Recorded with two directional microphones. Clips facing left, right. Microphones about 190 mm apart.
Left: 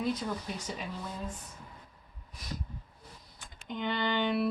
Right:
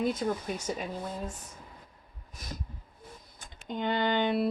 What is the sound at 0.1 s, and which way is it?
Speech, 50° right (ahead or behind).